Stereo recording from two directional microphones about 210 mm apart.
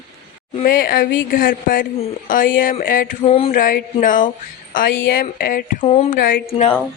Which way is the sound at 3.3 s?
25° left (ahead or behind).